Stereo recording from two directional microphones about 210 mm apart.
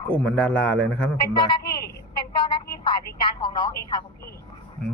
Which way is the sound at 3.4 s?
20° left (ahead or behind).